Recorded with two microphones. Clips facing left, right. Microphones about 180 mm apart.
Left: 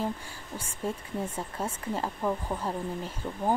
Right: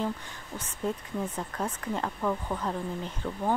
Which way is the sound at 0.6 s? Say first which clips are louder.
Right 2 dB; 10° left (ahead or behind).